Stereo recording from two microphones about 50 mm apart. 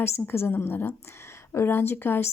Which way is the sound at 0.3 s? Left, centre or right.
Left.